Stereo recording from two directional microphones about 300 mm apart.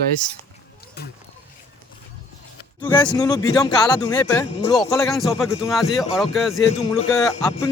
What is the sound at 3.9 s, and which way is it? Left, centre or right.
Speech, centre.